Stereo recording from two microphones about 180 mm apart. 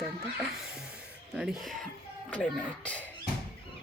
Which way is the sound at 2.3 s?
5° left (ahead or behind).